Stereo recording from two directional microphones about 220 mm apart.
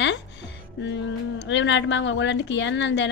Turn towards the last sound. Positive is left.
turn(degrees=55)  # may be behind; listen again after turning